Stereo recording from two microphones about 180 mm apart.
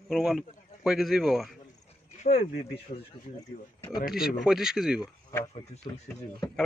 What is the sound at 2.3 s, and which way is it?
Speech, 35° left (ahead or behind).